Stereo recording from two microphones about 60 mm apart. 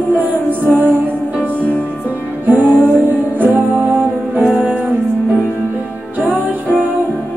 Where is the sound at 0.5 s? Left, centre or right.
Right.